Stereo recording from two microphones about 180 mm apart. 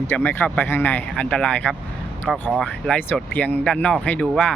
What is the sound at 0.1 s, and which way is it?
Speech, 10° left (ahead or behind).